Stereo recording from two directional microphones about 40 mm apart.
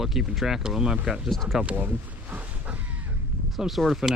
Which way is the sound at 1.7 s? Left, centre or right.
Right.